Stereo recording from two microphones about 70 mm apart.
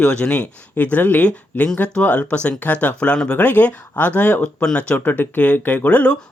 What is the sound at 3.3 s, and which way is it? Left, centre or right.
Speech, left.